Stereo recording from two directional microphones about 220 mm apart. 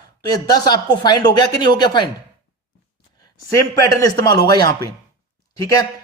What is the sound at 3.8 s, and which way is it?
Speech, 15° left (ahead or behind).